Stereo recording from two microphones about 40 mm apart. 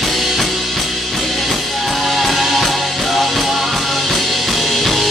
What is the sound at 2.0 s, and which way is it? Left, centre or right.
Music, centre.